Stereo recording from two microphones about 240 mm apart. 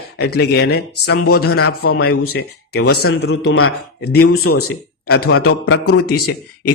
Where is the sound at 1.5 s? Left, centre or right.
Left.